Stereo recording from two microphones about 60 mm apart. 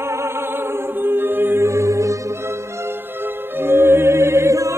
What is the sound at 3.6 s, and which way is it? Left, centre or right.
Music, right.